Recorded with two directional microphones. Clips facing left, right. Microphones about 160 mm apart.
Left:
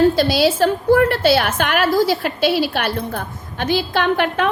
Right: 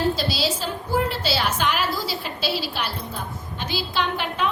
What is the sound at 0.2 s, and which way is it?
A woman's voice, 60° left (ahead or behind).